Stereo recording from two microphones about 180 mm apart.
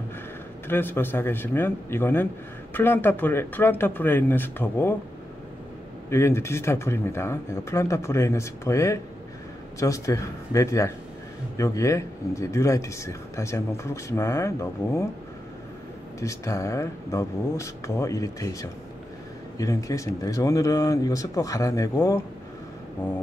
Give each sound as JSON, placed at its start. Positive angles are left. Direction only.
{"t": 0.7, "sound": "speech", "side_deg": 10}
{"t": 6.0, "sound": "speech", "side_deg": 15}
{"t": 16.2, "sound": "speech", "side_deg": 15}